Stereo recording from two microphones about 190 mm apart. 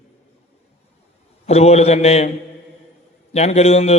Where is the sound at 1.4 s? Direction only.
35° left (ahead or behind).